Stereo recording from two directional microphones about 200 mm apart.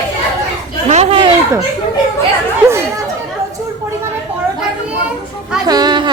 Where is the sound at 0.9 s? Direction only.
35° right (ahead or behind).